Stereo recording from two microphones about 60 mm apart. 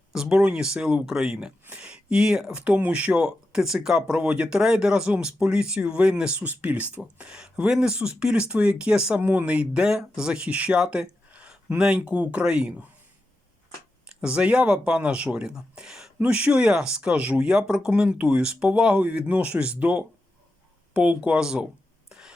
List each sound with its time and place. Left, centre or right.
0.1 s a sound: centre
0.4 s speech: centre
3.2 s speech: centre
9.2 s speech: right
11.8 s speech: centre
14.2 s speech: centre
16.1 s speech: right
22.1 s a sound: centre